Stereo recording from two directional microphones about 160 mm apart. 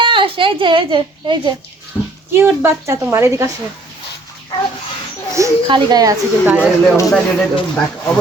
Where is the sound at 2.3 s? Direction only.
15° right (ahead or behind).